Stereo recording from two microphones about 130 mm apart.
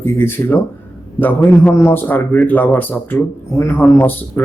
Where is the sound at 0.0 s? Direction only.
15° left (ahead or behind).